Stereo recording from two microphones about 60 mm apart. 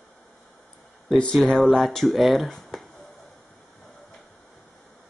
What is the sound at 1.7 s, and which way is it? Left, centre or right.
Speech, centre.